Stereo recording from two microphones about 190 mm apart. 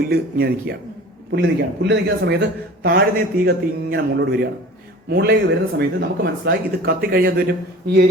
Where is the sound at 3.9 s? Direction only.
60° right (ahead or behind).